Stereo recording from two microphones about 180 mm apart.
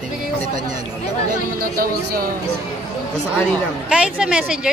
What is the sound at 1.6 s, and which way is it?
Speech, 55° right (ahead or behind).